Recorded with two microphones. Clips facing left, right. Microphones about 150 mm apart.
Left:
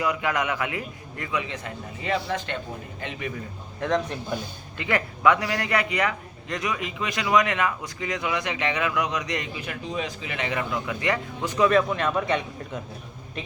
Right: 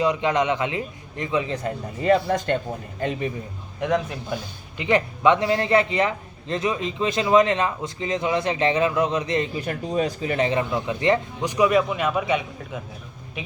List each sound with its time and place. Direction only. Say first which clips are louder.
0.0 s a man's voice: right 5 dB; 25° right (ahead or behind)
3.8 s a man's voice: right 2 dB; 10° right (ahead or behind)
4.8 s a man's voice: right 4 dB; 20° right (ahead or behind)
11.4 s a man's voice: right 1 dB; 15° right (ahead or behind)